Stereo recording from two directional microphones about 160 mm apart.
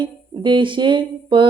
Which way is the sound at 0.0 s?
30° right (ahead or behind).